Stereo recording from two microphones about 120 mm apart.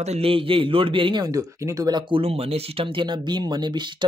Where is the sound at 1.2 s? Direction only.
30° right (ahead or behind).